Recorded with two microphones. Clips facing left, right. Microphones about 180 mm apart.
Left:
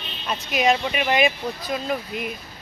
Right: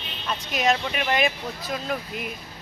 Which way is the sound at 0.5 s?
5° left (ahead or behind).